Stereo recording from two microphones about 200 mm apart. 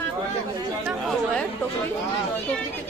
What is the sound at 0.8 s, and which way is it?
Chatter, centre (ahead or behind).